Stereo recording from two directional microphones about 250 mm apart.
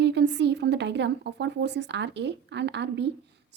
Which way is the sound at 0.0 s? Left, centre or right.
Right.